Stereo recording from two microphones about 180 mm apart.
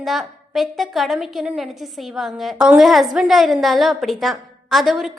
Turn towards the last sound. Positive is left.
turn(degrees=0)  # may be behind; listen again after turning